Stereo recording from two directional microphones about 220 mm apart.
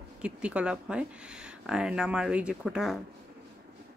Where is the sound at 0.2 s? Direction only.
5° right (ahead or behind).